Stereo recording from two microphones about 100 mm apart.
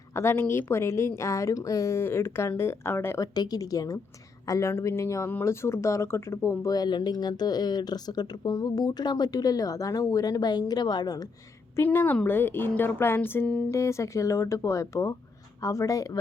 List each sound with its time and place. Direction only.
0.1 s speech: 25° left (ahead or behind)
3.3 s speech: 40° left (ahead or behind)
6.7 s speech: 45° left (ahead or behind)
11.8 s speech: 20° left (ahead or behind)
13.7 s speech: 30° left (ahead or behind)